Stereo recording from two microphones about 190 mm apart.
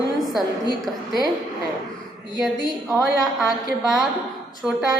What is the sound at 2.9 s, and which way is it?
A woman's voice, centre (ahead or behind).